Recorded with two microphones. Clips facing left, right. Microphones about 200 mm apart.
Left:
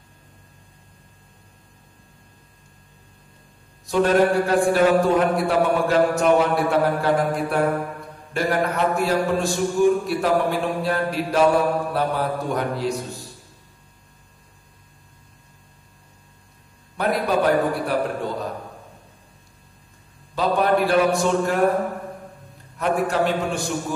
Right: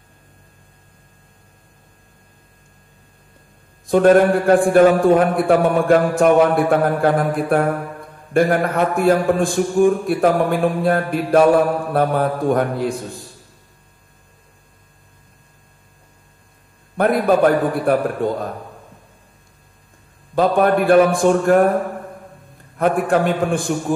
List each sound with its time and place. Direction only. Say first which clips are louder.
3.8 s a man's voice: right 6 dB; 50° right (ahead or behind)
16.9 s a man's voice: right 6 dB; 50° right (ahead or behind)
20.3 s a man's voice: right 4 dB; 50° right (ahead or behind)